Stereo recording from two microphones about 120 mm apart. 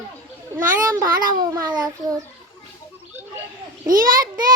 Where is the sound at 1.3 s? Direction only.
35° right (ahead or behind).